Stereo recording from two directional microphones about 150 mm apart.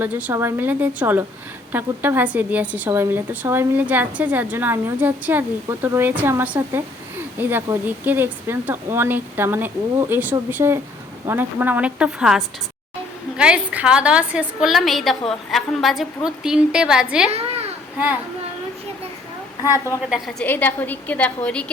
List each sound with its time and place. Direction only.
0.0 s a woman's voice: 10° right (ahead or behind)
19.6 s a woman's voice: 20° left (ahead or behind)
20.1 s a woman's voice: 5° right (ahead or behind)
20.4 s a woman's voice: 10° left (ahead or behind)